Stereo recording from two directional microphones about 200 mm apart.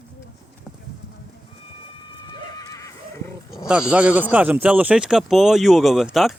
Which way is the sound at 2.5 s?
15° left (ahead or behind).